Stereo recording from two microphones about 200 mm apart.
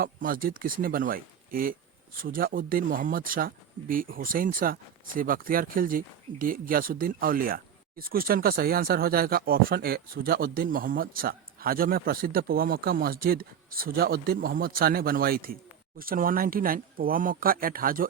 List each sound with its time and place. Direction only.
0.0 s speech: 45° right (ahead or behind)